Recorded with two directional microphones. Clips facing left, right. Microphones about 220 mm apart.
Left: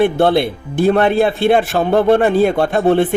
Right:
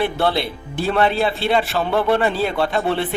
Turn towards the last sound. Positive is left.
turn(degrees=45)  # may be behind; listen again after turning